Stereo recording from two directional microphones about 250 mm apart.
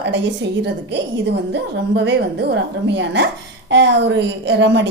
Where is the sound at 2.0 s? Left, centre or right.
Right.